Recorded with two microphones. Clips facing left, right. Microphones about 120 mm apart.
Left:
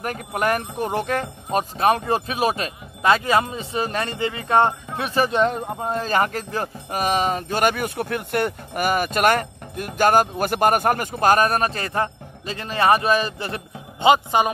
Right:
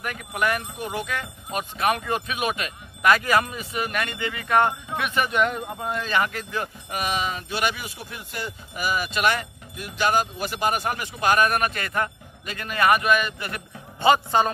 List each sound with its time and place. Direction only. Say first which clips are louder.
0.0 s speech: left 3 dB; 40° left (ahead or behind); by 14.5 s 15° left (ahead or behind)